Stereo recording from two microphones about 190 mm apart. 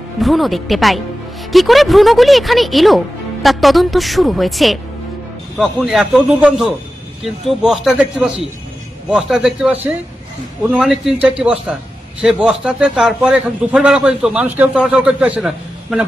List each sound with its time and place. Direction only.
0.2 s a man's voice: centre (ahead or behind)
9.1 s a man's voice: 5° right (ahead or behind)